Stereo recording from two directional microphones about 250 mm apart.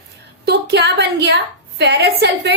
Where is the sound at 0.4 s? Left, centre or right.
Right.